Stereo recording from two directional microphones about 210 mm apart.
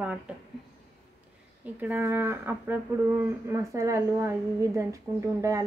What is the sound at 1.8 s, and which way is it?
A woman's voice, 10° right (ahead or behind).